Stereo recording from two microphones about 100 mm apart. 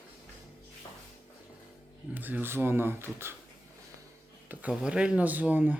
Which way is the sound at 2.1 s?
20° right (ahead or behind).